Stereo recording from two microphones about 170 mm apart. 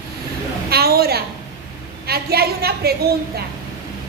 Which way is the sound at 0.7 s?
65° right (ahead or behind).